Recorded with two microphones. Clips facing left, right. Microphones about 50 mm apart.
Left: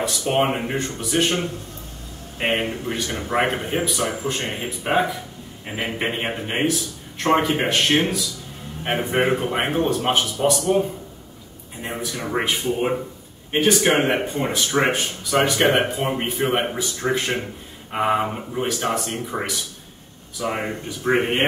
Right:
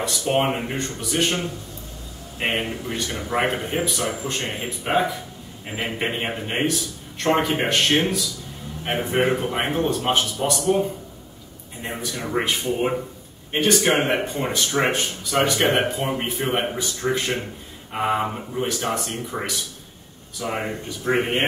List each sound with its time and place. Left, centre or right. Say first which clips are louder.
0.4 s speech: left 2 dB; centre
2.3 s speech: left 2 dB; left
2.9 s a man's voice: left 1 dB; centre
9.1 s a man's voice: even; centre
11.8 s a man's voice: left 1 dB; centre